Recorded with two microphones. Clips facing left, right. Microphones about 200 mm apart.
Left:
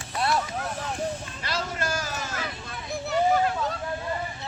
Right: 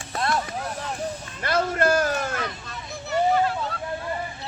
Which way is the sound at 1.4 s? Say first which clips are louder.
Right 12 dB; 55° right (ahead or behind).